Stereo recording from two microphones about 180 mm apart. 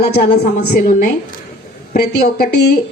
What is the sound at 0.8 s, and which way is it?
Speech, 45° left (ahead or behind).